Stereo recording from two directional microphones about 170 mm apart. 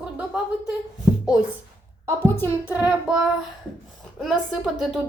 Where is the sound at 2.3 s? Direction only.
15° left (ahead or behind).